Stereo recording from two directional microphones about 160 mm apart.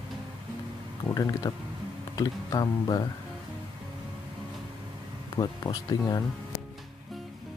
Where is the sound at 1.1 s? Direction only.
20° left (ahead or behind).